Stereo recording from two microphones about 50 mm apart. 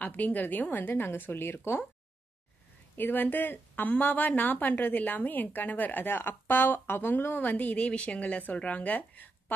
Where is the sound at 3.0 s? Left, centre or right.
Left.